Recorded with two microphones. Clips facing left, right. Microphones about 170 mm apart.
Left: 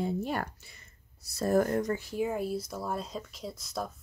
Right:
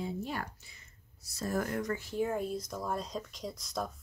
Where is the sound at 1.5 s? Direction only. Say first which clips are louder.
Left 8 dB; 35° left (ahead or behind).